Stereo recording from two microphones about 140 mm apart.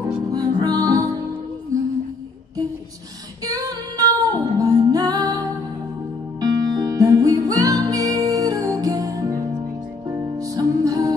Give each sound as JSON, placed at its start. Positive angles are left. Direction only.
{"t": 0.3, "sound": "music", "side_deg": -30}
{"t": 3.4, "sound": "female singing", "side_deg": -25}
{"t": 6.4, "sound": "music", "side_deg": -30}